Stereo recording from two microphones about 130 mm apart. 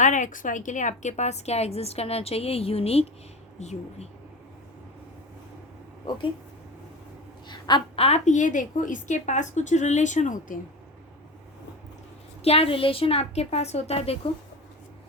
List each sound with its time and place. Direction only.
0.0 s a woman's voice: 75° left (ahead or behind); by 4.1 s 55° left (ahead or behind)
7.4 s a sound: 35° left (ahead or behind)
8.0 s a woman's voice: 60° left (ahead or behind)
12.4 s a woman's voice: 50° left (ahead or behind)